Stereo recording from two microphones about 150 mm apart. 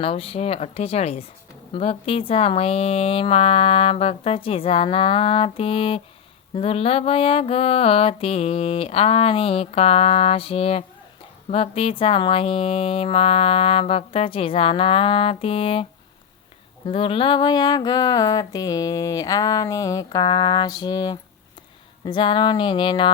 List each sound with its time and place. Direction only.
0.0 s speech: 40° left (ahead or behind)
16.8 s a sound: 35° left (ahead or behind)
22.0 s speech: 30° left (ahead or behind)